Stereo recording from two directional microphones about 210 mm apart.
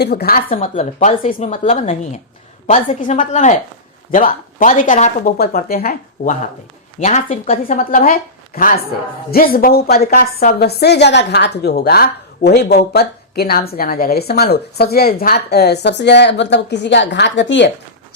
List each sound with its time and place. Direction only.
0.0 s speech: 50° left (ahead or behind); by 5.3 s 35° left (ahead or behind)
5.4 s a woman's voice: 45° left (ahead or behind)